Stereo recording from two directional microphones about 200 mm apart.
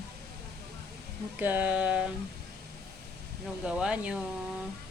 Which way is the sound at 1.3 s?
10° right (ahead or behind).